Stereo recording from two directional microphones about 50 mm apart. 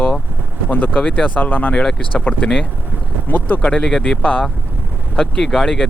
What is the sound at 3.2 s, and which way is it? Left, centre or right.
Speech, left.